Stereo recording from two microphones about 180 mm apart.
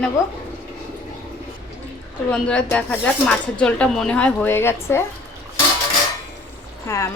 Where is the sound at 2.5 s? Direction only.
5° left (ahead or behind).